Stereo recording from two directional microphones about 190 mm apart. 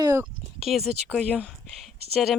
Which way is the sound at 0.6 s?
Centre (ahead or behind).